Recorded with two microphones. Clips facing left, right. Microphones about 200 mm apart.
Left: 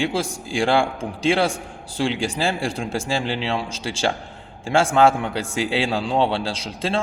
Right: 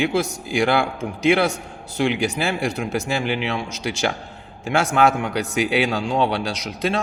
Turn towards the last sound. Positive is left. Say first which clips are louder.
# right 1 dB
turn(degrees=30)  # may be behind; listen again after turning